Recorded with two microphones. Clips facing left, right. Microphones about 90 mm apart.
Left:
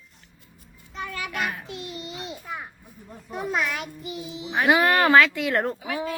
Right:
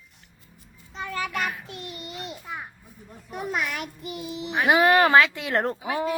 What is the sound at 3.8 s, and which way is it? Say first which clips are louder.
Child singing: even; 55° right (ahead or behind).